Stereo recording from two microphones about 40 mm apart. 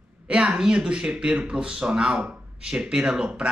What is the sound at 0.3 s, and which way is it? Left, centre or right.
A man's voice, right.